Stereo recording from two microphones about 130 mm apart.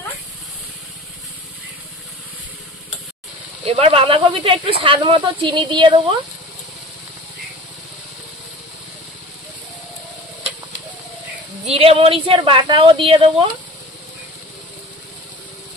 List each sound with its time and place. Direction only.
3.6 s speech: 50° right (ahead or behind)
11.6 s speech: 50° right (ahead or behind)